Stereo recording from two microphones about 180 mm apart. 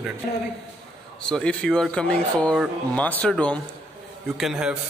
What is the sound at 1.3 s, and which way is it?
Speech, 5° left (ahead or behind).